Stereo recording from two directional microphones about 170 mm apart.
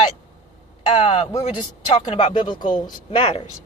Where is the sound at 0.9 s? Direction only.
30° left (ahead or behind).